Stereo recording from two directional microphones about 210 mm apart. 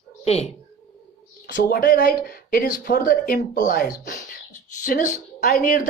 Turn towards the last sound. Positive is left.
turn(degrees=40)  # may be behind; listen again after turning